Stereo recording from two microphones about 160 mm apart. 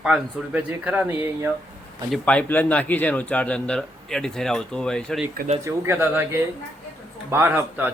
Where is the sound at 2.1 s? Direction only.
5° left (ahead or behind).